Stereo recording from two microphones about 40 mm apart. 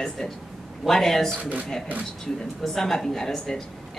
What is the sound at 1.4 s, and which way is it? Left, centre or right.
Speech, right.